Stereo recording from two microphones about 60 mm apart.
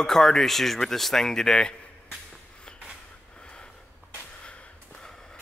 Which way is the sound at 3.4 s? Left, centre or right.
Centre.